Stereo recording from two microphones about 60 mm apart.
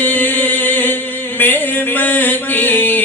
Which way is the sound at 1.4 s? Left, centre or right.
Left.